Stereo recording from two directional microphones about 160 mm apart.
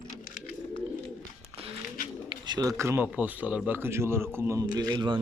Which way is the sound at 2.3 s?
25° right (ahead or behind).